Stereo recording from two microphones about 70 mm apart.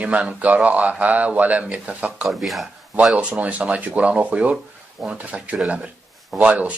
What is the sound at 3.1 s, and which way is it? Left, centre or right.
Speech, centre.